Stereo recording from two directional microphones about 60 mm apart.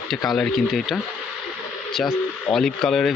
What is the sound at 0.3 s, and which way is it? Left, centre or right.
Speech, centre.